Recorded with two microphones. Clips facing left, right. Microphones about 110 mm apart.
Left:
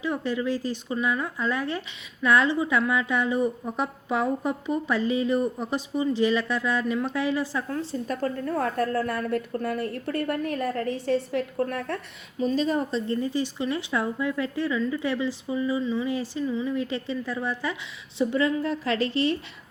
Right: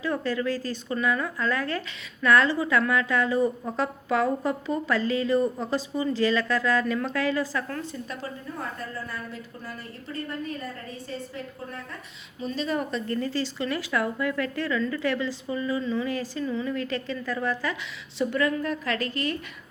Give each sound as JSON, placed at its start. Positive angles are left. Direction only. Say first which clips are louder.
{"t": 0.0, "sound": "a woman's voice", "louder": "even", "side_deg": 15}
{"t": 7.9, "sound": "speech", "louder": "left 7 dB", "side_deg": 45}
{"t": 8.4, "sound": "a woman's voice", "louder": "left 12 dB", "side_deg": 65}
{"t": 12.4, "sound": "a woman's voice", "louder": "left 4 dB", "side_deg": 40}
{"t": 13.1, "sound": "a woman's voice", "louder": "left 2 dB", "side_deg": 15}